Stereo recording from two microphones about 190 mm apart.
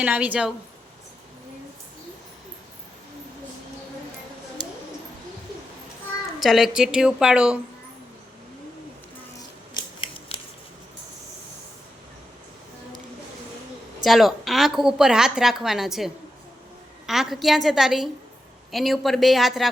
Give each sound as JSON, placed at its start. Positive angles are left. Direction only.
{"t": 0.0, "sound": "a woman's voice", "side_deg": -5}
{"t": 6.4, "sound": "a woman's voice", "side_deg": 0}
{"t": 9.7, "sound": "scissors", "side_deg": 30}
{"t": 14.0, "sound": "a woman's voice", "side_deg": 0}